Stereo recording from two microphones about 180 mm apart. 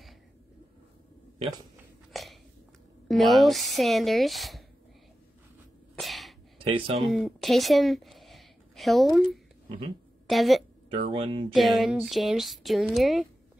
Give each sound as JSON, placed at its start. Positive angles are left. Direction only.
{"t": 2.1, "sound": "a sound", "side_deg": 0}
{"t": 3.1, "sound": "speech", "side_deg": 0}
{"t": 5.9, "sound": "sneeze", "side_deg": 0}
{"t": 6.6, "sound": "speech", "side_deg": -30}
{"t": 7.1, "sound": "a woman's voice", "side_deg": 0}
{"t": 10.9, "sound": "speech", "side_deg": -30}
{"t": 11.5, "sound": "speech", "side_deg": 0}